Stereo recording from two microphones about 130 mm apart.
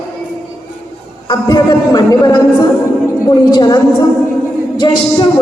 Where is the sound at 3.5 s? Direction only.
30° left (ahead or behind).